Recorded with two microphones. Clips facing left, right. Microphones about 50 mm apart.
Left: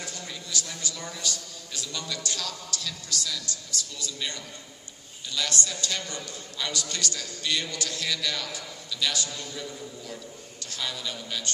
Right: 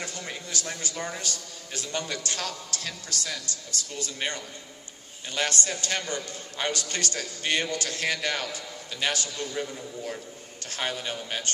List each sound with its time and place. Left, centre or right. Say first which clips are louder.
0.0 s a man's voice: right 3 dB; right